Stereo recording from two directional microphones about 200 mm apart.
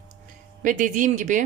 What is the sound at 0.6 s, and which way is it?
Speech, 40° right (ahead or behind).